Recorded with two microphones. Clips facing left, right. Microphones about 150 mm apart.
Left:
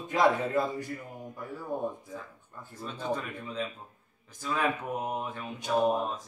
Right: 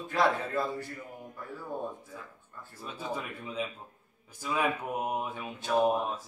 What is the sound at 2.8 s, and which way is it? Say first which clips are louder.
Speech: left 3 dB; 10° right (ahead or behind).